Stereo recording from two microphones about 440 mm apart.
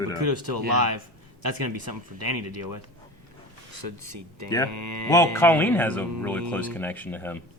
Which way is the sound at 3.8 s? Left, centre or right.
Right.